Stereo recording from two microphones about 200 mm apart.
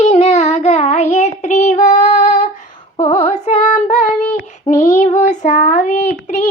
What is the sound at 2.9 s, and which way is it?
Female singing, 35° left (ahead or behind).